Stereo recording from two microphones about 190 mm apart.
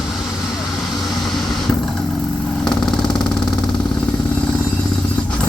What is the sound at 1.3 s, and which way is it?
Mechanisms, centre (ahead or behind).